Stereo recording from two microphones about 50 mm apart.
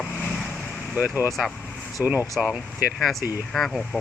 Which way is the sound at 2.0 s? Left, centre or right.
Centre.